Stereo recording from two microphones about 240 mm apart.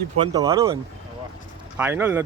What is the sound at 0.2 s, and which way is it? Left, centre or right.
Speech, centre.